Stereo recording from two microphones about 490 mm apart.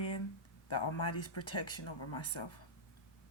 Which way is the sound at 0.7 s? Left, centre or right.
Left.